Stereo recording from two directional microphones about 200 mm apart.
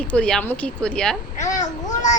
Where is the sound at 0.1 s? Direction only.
5° left (ahead or behind).